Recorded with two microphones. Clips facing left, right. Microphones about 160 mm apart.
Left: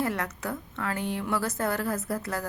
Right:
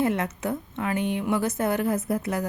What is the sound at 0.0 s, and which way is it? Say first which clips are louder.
A woman's voice: right 5 dB; 20° right (ahead or behind).